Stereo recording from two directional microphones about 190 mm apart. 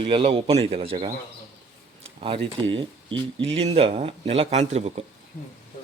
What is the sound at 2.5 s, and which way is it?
Speech, 25° right (ahead or behind).